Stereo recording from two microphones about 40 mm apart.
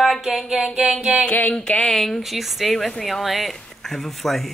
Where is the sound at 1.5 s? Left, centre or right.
Centre.